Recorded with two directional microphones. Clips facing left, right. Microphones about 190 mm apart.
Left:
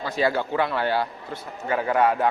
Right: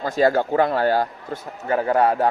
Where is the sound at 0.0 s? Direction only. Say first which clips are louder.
Right 5 dB; 45° right (ahead or behind).